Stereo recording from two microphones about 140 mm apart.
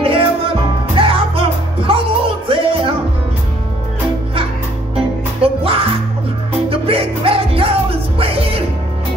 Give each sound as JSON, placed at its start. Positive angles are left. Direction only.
{"t": 0.0, "sound": "music", "side_deg": -40}
{"t": 4.9, "sound": "music", "side_deg": -45}